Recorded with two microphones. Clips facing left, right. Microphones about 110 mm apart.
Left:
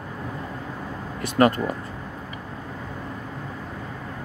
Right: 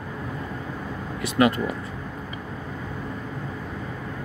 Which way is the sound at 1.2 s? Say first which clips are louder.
Left 1 dB; 45° left (ahead or behind).